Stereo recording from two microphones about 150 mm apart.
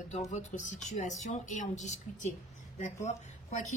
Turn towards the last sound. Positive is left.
turn(degrees=50)  # may be behind; listen again after turning